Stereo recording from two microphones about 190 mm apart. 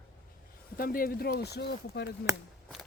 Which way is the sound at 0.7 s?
50° left (ahead or behind).